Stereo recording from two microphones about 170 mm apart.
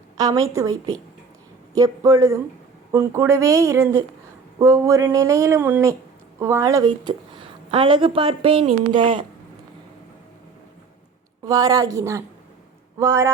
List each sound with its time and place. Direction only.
0.2 s a woman's voice: 20° right (ahead or behind)
11.4 s a woman's voice: 20° right (ahead or behind)